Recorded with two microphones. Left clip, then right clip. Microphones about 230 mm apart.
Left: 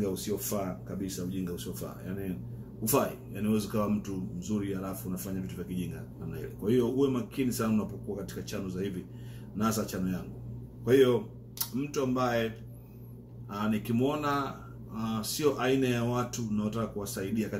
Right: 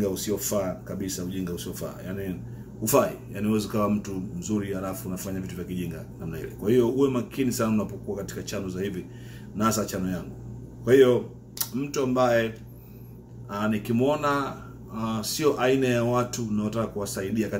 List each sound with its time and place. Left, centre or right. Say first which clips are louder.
0.0 s speech: right 5 dB; centre
13.5 s speech: right 5 dB; centre